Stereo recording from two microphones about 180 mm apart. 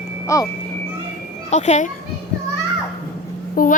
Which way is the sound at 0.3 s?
20° left (ahead or behind).